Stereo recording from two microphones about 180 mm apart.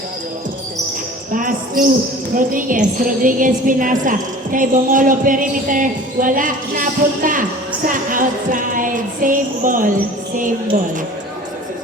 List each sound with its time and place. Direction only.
1.3 s a woman's voice: 50° right (ahead or behind)